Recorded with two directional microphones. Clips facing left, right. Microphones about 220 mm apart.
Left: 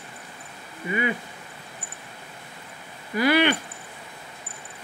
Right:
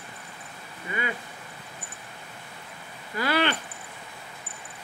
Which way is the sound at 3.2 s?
15° left (ahead or behind).